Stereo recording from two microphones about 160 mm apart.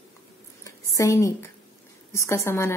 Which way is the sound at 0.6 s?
20° left (ahead or behind).